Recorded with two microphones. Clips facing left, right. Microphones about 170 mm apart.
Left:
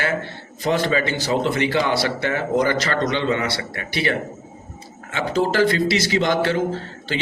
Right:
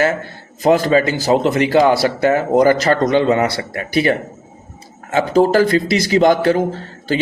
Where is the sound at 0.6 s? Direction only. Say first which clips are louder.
Right 7 dB; 40° right (ahead or behind).